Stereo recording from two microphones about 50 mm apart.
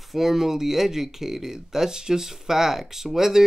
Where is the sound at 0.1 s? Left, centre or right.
Centre.